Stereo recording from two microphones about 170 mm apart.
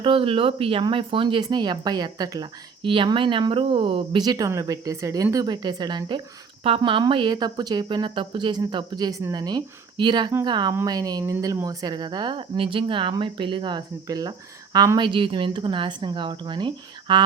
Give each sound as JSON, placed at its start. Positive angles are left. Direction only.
{"t": 0.0, "sound": "speech", "side_deg": -30}